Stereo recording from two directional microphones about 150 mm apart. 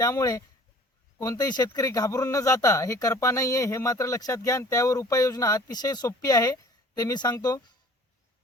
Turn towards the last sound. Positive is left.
turn(degrees=25)  # may be behind; listen again after turning